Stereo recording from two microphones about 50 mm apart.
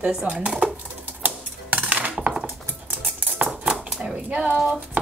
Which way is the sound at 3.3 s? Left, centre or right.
Right.